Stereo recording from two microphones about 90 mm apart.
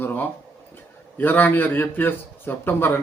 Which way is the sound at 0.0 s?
20° left (ahead or behind).